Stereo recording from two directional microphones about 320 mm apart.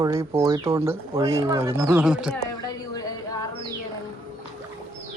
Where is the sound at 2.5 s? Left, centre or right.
Centre.